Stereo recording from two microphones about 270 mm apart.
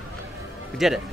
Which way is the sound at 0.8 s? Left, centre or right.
Centre.